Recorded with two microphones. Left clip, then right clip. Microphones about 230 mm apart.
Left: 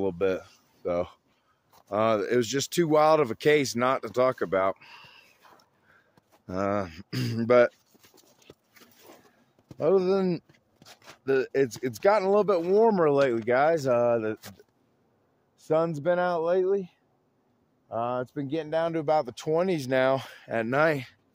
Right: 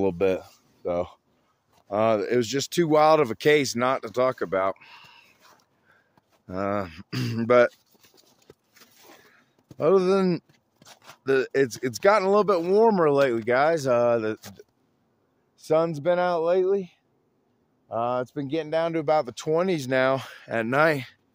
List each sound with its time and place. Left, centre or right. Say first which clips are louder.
0.0 s speech: right 3 dB; right; by 5.9 s centre
6.4 s a sound: right 1 dB; centre
9.8 s speech: right 3 dB; right
10.5 s speech: right 1 dB; centre
15.5 s speech: right 3 dB; centre